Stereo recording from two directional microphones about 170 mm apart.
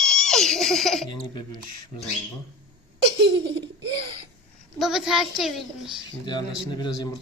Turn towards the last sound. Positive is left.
turn(degrees=25)  # may be behind; listen again after turning